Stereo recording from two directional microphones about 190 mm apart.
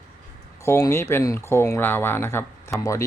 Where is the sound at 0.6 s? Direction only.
15° left (ahead or behind).